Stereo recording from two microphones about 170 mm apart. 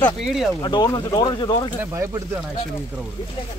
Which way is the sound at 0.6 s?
25° left (ahead or behind).